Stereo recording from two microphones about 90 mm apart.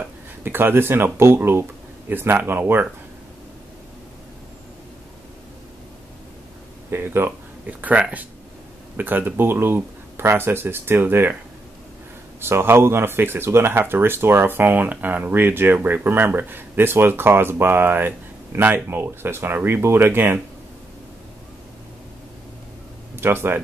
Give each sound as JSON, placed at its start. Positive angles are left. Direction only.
{"t": 0.0, "sound": "speech", "side_deg": -25}
{"t": 6.9, "sound": "speech", "side_deg": -25}
{"t": 12.4, "sound": "speech", "side_deg": -25}
{"t": 23.1, "sound": "speech", "side_deg": -25}